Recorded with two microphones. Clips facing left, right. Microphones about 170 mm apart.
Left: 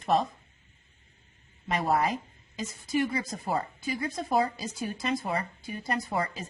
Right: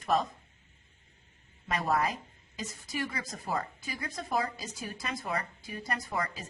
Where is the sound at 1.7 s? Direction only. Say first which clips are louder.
Left 3 dB; 25° left (ahead or behind).